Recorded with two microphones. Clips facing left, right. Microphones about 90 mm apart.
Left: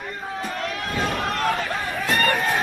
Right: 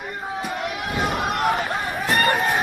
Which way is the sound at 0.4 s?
15° right (ahead or behind).